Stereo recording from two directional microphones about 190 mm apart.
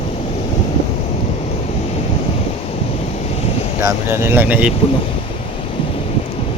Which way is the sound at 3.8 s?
15° right (ahead or behind).